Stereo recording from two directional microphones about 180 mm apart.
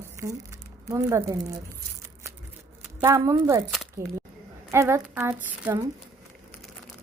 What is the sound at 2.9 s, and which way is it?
Speech, 15° right (ahead or behind).